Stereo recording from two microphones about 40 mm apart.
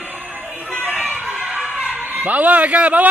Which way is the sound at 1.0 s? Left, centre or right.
Right.